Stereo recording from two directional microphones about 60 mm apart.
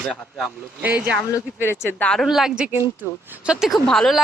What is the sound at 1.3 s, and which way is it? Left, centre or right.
Speech, left.